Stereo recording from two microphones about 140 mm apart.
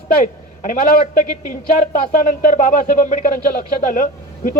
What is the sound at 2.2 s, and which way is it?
A man's voice, 70° left (ahead or behind).